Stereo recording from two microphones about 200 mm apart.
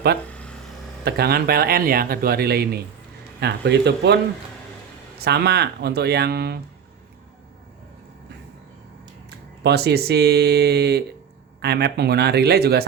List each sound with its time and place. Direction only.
0.3 s a sound: 5° left (ahead or behind)
1.0 s speech: 50° right (ahead or behind)
5.2 s speech: 55° right (ahead or behind)
9.6 s speech: 55° right (ahead or behind)